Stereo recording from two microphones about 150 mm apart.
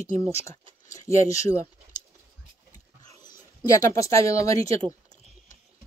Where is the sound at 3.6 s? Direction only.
20° left (ahead or behind).